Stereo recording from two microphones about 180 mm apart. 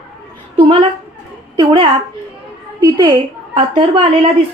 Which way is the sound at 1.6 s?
25° right (ahead or behind).